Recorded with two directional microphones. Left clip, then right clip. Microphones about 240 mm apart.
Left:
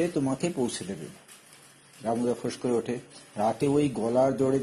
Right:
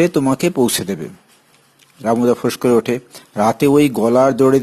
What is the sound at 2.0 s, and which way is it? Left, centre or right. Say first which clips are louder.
A man's voice: right 13 dB; right.